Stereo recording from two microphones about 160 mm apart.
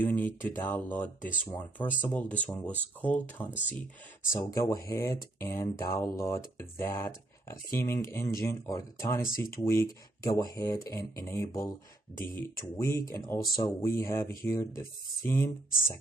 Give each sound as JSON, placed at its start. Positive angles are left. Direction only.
{"t": 0.0, "sound": "speech", "side_deg": 10}
{"t": 12.7, "sound": "speech", "side_deg": 15}